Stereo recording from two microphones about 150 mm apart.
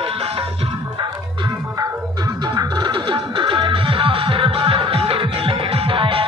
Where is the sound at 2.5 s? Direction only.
30° right (ahead or behind).